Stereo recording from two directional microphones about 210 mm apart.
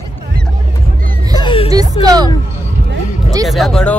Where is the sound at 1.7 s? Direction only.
15° right (ahead or behind).